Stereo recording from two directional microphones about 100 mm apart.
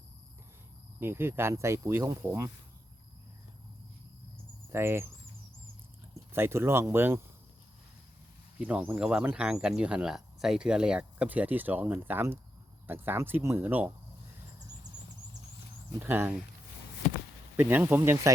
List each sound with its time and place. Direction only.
0.9 s speech: 25° right (ahead or behind)
4.7 s speech: 25° right (ahead or behind)
6.3 s speech: 25° right (ahead or behind)
8.5 s speech: 15° right (ahead or behind)
14.8 s a sound: 40° right (ahead or behind)
16.0 s speech: 20° right (ahead or behind)
17.6 s speech: 20° right (ahead or behind)